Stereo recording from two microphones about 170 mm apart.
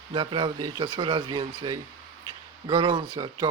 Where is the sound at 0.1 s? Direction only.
30° right (ahead or behind).